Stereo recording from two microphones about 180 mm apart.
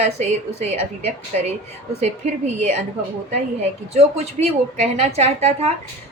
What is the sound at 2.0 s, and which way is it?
Speech, 40° right (ahead or behind).